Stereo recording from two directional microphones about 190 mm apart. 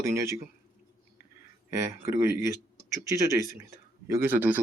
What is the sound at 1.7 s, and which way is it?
Speech, 15° right (ahead or behind).